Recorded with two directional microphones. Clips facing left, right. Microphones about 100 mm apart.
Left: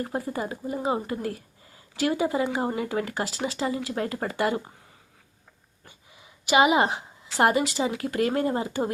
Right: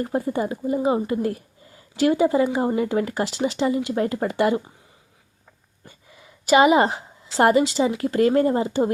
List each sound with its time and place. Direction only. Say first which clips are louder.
0.0 s speech: right 6 dB; 25° right (ahead or behind)
0.8 s speech: right 5 dB; 15° right (ahead or behind)
1.0 s speech: right 7 dB; 30° right (ahead or behind)
6.4 s a woman's voice: right 5 dB; 40° right (ahead or behind)